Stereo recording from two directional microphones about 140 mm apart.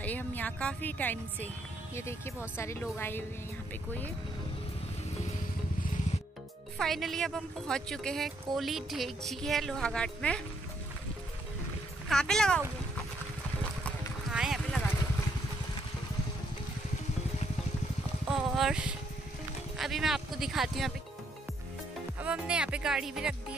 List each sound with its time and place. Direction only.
0.0 s speech: 10° left (ahead or behind)
6.8 s speech: centre (ahead or behind)
12.1 s speech: 5° left (ahead or behind)
14.3 s a sound: 5° right (ahead or behind)
18.2 s speech: 5° right (ahead or behind)
22.2 s speech: 10° right (ahead or behind)